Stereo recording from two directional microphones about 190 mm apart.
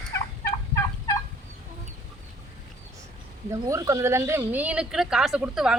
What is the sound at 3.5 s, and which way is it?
Speech, 15° right (ahead or behind).